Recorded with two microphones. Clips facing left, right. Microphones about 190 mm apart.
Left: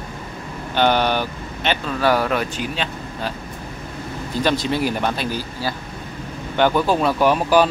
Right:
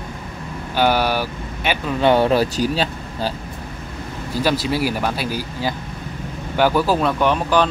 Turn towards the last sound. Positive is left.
turn(degrees=10)  # may be behind; listen again after turning